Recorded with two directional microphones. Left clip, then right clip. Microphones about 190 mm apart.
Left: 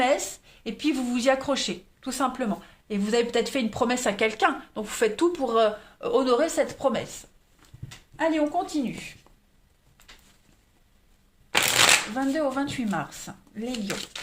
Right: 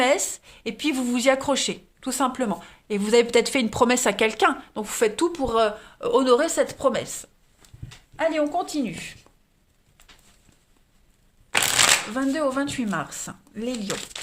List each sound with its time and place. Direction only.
0.0 s speech: 45° right (ahead or behind)
4.3 s speech: 35° right (ahead or behind); by 9.1 s 50° right (ahead or behind)
12.1 s speech: 45° right (ahead or behind)